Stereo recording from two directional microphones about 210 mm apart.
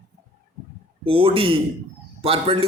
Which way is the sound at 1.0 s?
25° right (ahead or behind).